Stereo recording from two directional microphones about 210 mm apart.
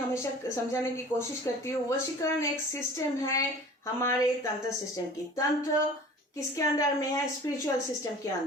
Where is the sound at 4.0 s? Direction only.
15° left (ahead or behind).